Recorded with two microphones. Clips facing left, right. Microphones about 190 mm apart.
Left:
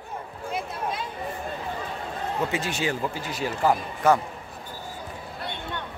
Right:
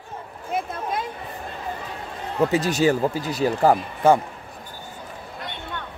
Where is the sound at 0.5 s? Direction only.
50° right (ahead or behind).